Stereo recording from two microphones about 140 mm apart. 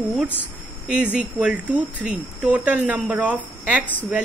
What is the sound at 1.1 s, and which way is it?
Speech, 10° right (ahead or behind).